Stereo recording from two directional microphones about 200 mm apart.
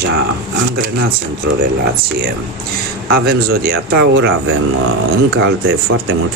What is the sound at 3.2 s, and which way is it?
Speech, 50° right (ahead or behind).